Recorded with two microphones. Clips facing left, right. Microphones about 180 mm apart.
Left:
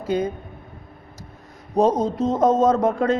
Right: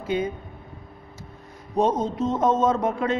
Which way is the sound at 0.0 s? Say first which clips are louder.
Left 3 dB; 40° left (ahead or behind).